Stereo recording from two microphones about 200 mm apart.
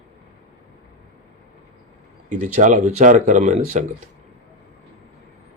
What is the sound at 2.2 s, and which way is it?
Speech, 40° right (ahead or behind).